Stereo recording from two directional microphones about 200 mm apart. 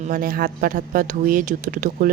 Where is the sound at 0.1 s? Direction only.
45° right (ahead or behind).